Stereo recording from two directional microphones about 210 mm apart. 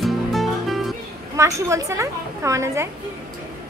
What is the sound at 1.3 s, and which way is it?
A woman's voice, 15° right (ahead or behind).